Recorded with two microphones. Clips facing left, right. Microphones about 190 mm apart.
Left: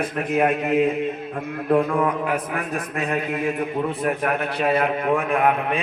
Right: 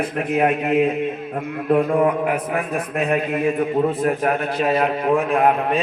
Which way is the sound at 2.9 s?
60° right (ahead or behind).